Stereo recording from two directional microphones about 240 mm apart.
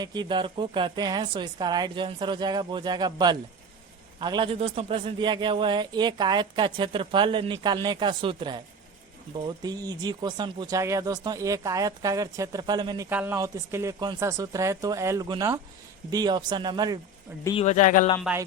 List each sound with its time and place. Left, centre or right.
0.0 s a man's voice: centre
9.6 s speech: centre
17.4 s a man's voice: left
18.2 s speech: centre